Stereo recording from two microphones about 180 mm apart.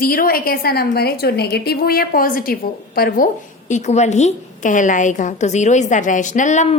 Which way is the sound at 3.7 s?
40° left (ahead or behind).